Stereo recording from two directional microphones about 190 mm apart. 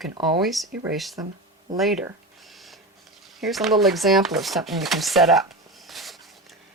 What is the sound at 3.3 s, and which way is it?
Speech, centre (ahead or behind).